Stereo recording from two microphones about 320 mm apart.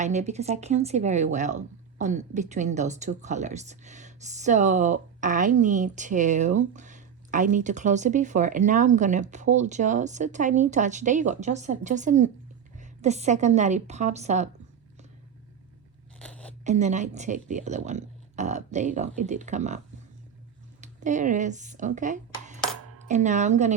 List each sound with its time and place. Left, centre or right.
0.0 s speech: right
16.1 s crunch: centre
16.6 s speech: right
20.8 s speech: right